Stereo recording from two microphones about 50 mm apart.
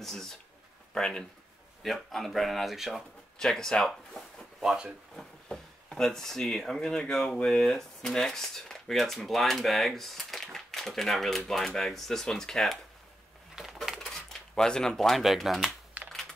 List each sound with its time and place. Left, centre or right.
0.0 s speech: centre
1.8 s speech: centre
3.3 s speech: centre
4.6 s speech: centre
5.1 s speech: centre
13.6 s a sound: centre
13.9 s a sound: centre
14.5 s speech: centre
16.0 s typing: right